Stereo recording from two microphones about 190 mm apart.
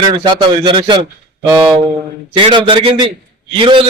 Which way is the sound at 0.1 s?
25° right (ahead or behind).